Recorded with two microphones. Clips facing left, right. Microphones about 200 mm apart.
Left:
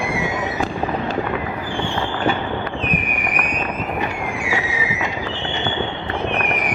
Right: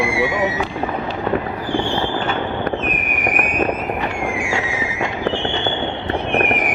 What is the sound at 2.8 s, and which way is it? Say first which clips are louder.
Fireworks: right 2 dB; 45° right (ahead or behind).